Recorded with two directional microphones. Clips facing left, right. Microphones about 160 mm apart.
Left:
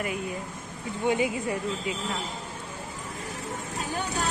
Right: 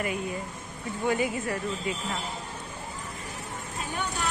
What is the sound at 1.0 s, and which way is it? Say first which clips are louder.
Speech: left 2 dB; 15° left (ahead or behind).